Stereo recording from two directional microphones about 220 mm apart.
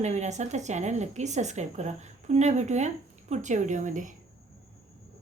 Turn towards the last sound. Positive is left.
turn(degrees=-35)  # may be behind; listen again after turning